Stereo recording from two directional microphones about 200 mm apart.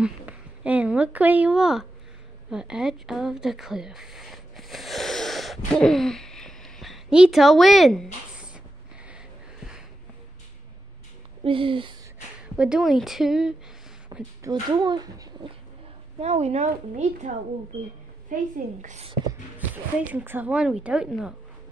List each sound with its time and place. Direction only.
0.0 s speech: 5° right (ahead or behind)
5.8 s hoot: centre (ahead or behind)
9.1 s a sound: 5° right (ahead or behind)
11.4 s speech: 25° right (ahead or behind)
12.5 s speech: 5° right (ahead or behind)
14.4 s speech: 20° right (ahead or behind)
16.2 s a woman's voice: 30° right (ahead or behind)
18.3 s a woman's voice: 40° right (ahead or behind)
19.2 s speech: 10° right (ahead or behind)